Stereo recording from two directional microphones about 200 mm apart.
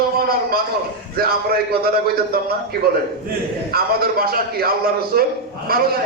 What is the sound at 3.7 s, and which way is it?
A man's voice, 50° right (ahead or behind).